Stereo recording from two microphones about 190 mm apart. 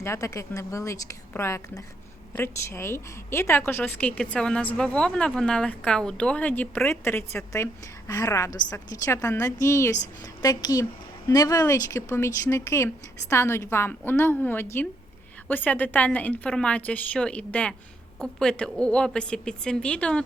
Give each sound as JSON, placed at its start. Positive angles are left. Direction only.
{"t": 0.0, "sound": "a woman's voice", "side_deg": 15}